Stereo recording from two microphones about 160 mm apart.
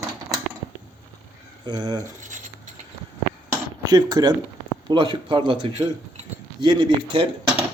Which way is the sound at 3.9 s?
25° right (ahead or behind).